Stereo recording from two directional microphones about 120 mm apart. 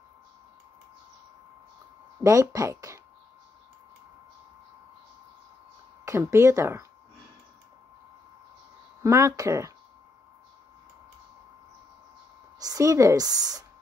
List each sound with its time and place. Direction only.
2.2 s speech: 30° right (ahead or behind)
6.0 s speech: 25° right (ahead or behind)
9.0 s speech: 25° right (ahead or behind)
12.5 s a woman's voice: 30° right (ahead or behind)